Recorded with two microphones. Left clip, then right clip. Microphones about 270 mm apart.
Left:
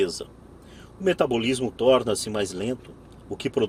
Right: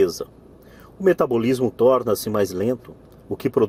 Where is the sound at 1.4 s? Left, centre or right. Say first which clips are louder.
Right 6 dB; right.